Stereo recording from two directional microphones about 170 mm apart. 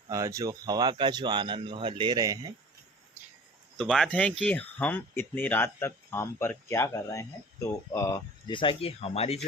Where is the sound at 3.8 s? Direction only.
5° left (ahead or behind).